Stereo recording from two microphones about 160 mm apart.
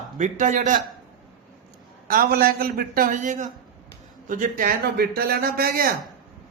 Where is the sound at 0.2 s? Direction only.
50° right (ahead or behind).